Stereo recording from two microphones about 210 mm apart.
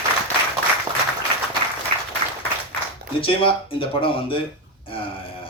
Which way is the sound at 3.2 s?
25° left (ahead or behind).